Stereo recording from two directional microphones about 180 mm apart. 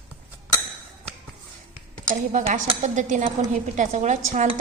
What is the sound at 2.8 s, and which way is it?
Speech, 45° right (ahead or behind).